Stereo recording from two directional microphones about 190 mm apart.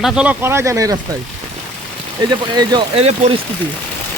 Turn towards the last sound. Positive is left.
turn(degrees=-35)  # may be behind; listen again after turning